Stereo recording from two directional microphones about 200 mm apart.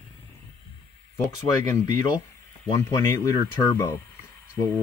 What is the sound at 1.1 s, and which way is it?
Speech, 15° left (ahead or behind).